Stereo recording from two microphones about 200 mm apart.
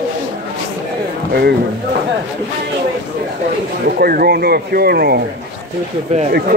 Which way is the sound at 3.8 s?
50° right (ahead or behind).